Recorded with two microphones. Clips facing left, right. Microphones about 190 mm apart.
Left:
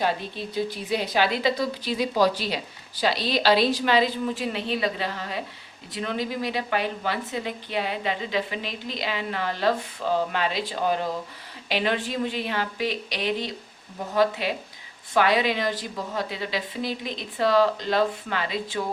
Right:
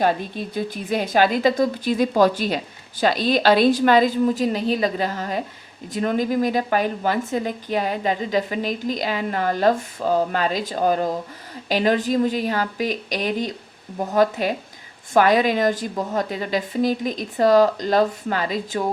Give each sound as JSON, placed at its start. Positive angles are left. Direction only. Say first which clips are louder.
{"t": 0.0, "sound": "a woman's voice", "louder": "right 5 dB", "side_deg": -50}